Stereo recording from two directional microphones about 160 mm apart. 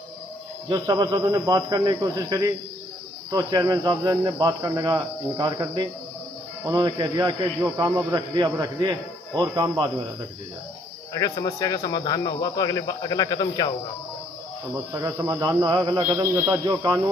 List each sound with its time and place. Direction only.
0.7 s speech: 25° right (ahead or behind)
11.1 s a man's voice: 20° left (ahead or behind)
14.9 s speech: 20° right (ahead or behind)